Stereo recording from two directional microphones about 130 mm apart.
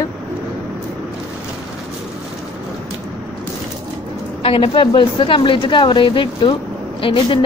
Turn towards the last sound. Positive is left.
turn(degrees=40)  # may be behind; listen again after turning